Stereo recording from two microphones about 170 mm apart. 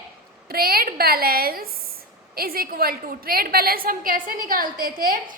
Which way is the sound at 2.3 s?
60° right (ahead or behind).